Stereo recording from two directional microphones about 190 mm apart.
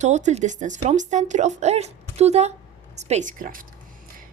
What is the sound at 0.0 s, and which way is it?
A woman's voice, 40° right (ahead or behind).